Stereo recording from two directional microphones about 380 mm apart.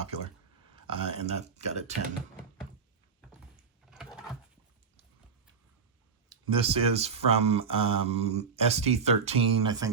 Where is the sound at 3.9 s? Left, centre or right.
Centre.